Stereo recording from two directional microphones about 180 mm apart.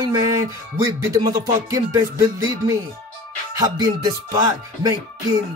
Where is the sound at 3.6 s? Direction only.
20° right (ahead or behind).